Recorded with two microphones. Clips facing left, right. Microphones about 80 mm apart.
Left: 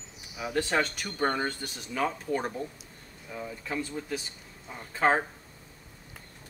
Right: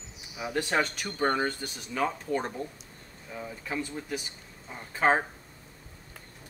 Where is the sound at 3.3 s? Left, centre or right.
Centre.